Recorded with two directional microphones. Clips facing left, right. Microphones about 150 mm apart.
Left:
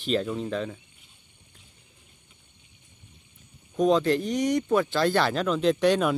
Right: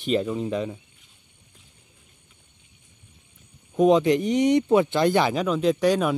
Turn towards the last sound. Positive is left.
turn(degrees=-10)  # may be behind; listen again after turning